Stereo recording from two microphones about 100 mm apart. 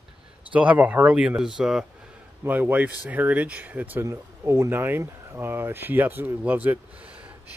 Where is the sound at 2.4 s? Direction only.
15° right (ahead or behind).